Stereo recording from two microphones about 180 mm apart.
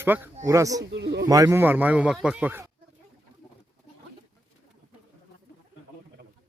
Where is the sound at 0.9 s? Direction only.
75° right (ahead or behind).